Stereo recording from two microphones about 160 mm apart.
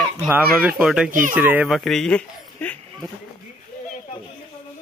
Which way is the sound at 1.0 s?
55° right (ahead or behind).